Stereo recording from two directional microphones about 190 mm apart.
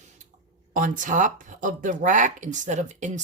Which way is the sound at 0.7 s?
45° right (ahead or behind).